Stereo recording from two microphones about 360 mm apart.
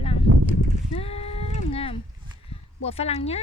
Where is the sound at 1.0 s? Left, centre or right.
Centre.